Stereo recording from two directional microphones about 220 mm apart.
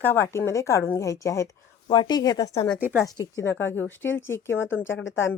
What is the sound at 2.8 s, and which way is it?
Speech, 10° right (ahead or behind).